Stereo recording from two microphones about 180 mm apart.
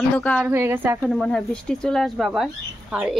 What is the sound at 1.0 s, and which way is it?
Speech, 5° left (ahead or behind).